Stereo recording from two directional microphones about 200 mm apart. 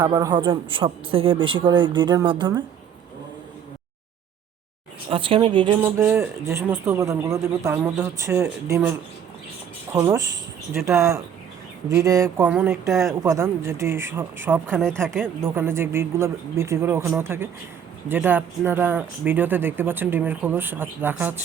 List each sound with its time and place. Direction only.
0.0 s a man's voice: 15° right (ahead or behind)
5.0 s a man's voice: 25° right (ahead or behind)
5.8 s speech: 10° right (ahead or behind)
14.8 s speech: 5° left (ahead or behind)
15.2 s speech: 10° right (ahead or behind)